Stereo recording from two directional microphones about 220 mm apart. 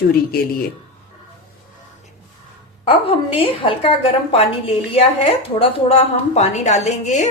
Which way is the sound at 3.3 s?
25° left (ahead or behind).